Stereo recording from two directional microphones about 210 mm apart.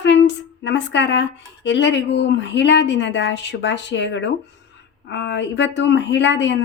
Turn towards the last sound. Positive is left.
turn(degrees=55)  # may be behind; listen again after turning